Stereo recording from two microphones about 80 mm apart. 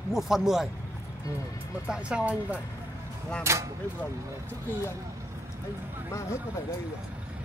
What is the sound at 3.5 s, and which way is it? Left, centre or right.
Speech, right.